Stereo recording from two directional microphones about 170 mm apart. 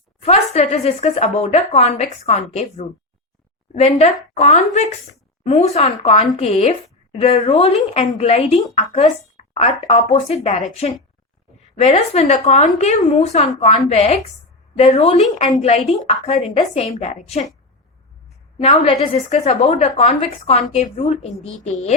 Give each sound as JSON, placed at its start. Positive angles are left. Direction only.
{"t": 0.2, "sound": "a woman's voice", "side_deg": 40}
{"t": 11.8, "sound": "a woman's voice", "side_deg": 40}
{"t": 18.6, "sound": "a woman's voice", "side_deg": 35}